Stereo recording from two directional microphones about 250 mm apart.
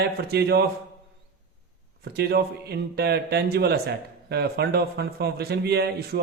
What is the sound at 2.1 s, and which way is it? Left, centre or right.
Speech, right.